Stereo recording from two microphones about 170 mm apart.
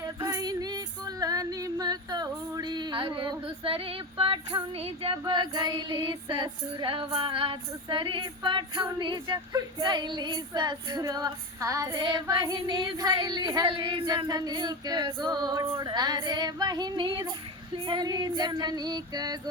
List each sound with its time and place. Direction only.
0.2 s female singing: 20° right (ahead or behind)